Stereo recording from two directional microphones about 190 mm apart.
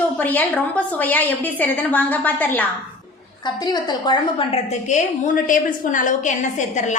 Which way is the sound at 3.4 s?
20° left (ahead or behind).